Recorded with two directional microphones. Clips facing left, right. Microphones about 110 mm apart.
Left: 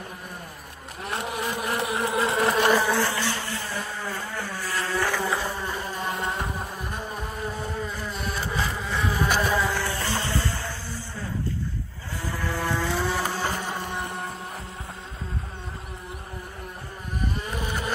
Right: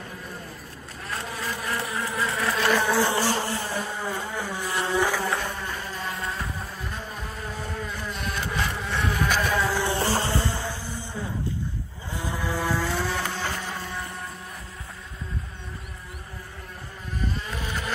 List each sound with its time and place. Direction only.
1.0 s vehicle: 20° left (ahead or behind)
2.0 s insect: 25° left (ahead or behind)
2.7 s insect: 5° left (ahead or behind)
3.1 s vehicle: 30° right (ahead or behind)
5.1 s insect: centre (ahead or behind)
7.7 s a sound: 5° left (ahead or behind)
9.8 s music: 30° right (ahead or behind)
12.2 s vehicle: 15° right (ahead or behind); by 14.3 s 25° left (ahead or behind)
17.6 s livestock: 45° left (ahead or behind)